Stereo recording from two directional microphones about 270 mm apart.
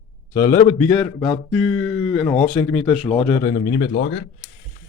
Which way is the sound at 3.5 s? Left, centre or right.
Left.